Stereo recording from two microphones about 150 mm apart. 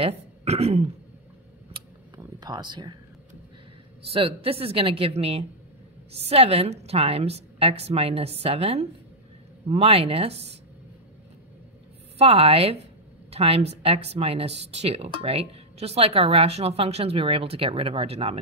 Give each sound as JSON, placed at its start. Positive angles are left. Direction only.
{"t": 0.0, "sound": "speech", "side_deg": -45}
{"t": 2.4, "sound": "speech", "side_deg": -30}
{"t": 4.1, "sound": "a woman's voice", "side_deg": -40}
{"t": 12.2, "sound": "speech", "side_deg": -40}